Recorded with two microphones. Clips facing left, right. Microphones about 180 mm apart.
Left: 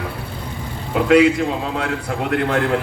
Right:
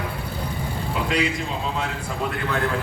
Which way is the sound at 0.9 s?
65° left (ahead or behind).